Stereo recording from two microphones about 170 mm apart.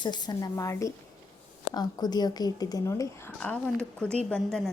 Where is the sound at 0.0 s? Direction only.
25° left (ahead or behind).